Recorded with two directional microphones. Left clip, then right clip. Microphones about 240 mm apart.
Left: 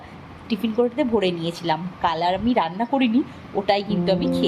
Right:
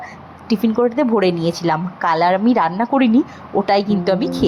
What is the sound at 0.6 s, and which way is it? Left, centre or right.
A woman's voice, centre.